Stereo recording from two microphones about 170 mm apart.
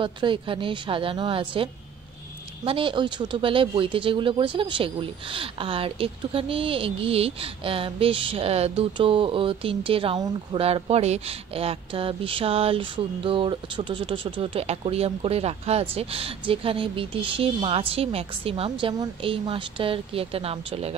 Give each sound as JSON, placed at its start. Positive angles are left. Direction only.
{"t": 0.0, "sound": "speech", "side_deg": -30}